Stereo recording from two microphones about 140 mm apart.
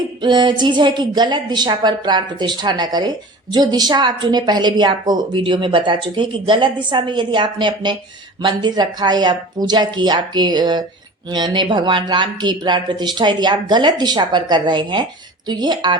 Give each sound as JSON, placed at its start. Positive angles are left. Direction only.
{"t": 0.2, "sound": "a woman's voice", "side_deg": -35}